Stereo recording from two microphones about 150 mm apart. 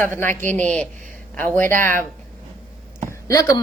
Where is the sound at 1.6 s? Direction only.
15° left (ahead or behind).